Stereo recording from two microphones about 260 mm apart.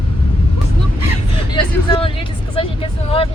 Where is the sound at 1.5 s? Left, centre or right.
Centre.